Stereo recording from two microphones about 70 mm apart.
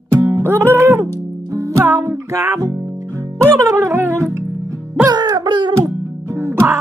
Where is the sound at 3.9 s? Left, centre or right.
Right.